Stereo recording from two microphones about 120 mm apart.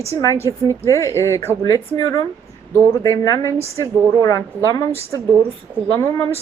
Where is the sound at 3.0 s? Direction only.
30° left (ahead or behind).